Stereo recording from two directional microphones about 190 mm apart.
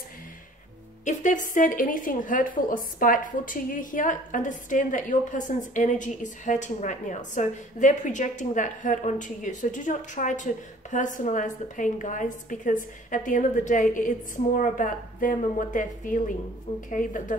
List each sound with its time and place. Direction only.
1.0 s a woman's voice: 40° left (ahead or behind)